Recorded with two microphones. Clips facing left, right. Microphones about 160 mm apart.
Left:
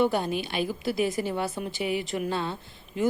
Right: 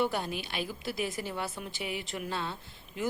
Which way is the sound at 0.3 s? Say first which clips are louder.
Left 7 dB; centre (ahead or behind).